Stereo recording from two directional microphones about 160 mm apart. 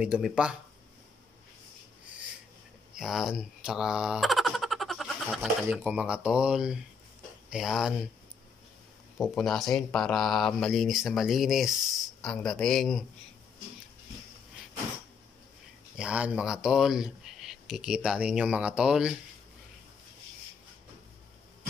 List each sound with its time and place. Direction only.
0.0 s speech: 5° right (ahead or behind)
2.9 s baby laughter: centre (ahead or behind)
5.7 s speech: 10° right (ahead or behind)
9.4 s speech: centre (ahead or behind)
16.0 s speech: 5° right (ahead or behind)